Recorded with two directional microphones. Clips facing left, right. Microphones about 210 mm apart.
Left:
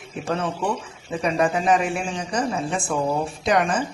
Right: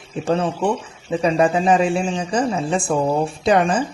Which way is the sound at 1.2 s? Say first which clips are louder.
Right 4 dB; 30° right (ahead or behind).